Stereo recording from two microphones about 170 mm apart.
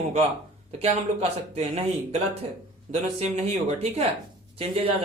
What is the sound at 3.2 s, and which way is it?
A man's voice, 40° right (ahead or behind).